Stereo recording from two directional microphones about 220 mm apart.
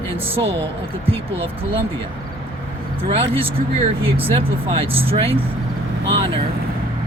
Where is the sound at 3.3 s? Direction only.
25° right (ahead or behind).